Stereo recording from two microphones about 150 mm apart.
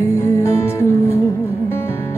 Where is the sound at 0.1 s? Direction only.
20° left (ahead or behind).